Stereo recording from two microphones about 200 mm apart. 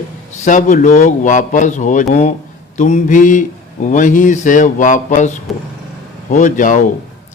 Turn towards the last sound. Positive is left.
turn(degrees=40)  # may be behind; listen again after turning